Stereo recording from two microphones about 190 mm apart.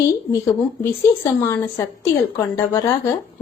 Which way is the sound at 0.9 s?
10° left (ahead or behind).